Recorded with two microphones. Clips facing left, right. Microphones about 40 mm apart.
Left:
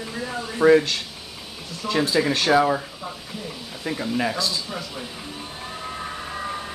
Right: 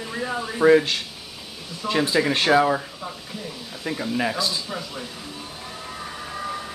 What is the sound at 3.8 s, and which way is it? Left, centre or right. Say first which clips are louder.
Speech: even; centre.